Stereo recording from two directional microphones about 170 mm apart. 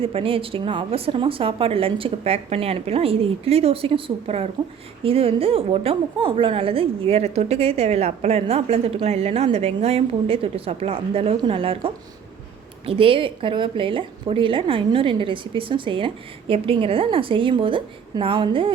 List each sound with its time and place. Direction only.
0.0 s a woman's voice: 35° right (ahead or behind)